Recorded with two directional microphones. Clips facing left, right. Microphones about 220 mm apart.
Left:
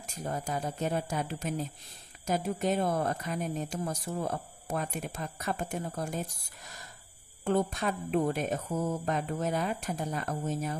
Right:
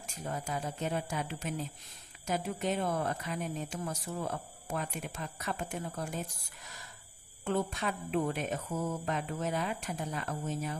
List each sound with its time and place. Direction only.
0.0 s speech: 40° left (ahead or behind)
7.4 s speech: 40° left (ahead or behind)